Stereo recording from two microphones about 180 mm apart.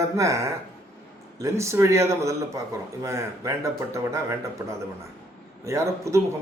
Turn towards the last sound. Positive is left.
turn(degrees=-15)  # may be behind; listen again after turning